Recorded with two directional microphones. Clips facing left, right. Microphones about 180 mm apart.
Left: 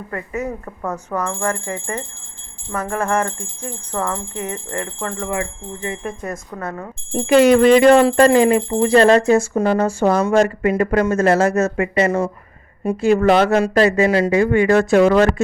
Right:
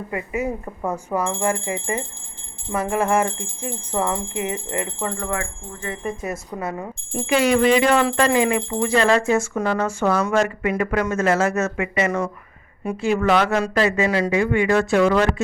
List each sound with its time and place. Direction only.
0.1 s speech: 10° right (ahead or behind)
5.3 s speech: 20° left (ahead or behind)
6.0 s speech: 5° right (ahead or behind)
7.1 s speech: 40° left (ahead or behind)